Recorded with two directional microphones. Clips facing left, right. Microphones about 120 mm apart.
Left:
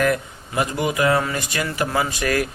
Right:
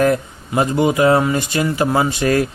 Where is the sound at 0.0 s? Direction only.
30° right (ahead or behind).